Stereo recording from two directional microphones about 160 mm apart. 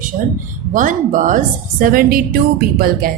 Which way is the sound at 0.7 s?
55° right (ahead or behind).